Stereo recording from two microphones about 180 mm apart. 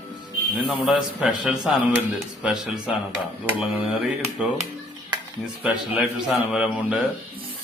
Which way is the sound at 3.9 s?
5° right (ahead or behind).